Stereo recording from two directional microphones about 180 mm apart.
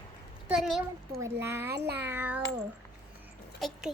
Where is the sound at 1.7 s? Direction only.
65° right (ahead or behind).